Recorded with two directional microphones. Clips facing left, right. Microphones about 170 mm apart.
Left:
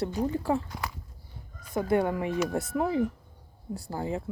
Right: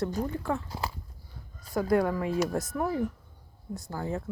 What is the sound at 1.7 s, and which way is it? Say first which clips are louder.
Speech: even; centre (ahead or behind).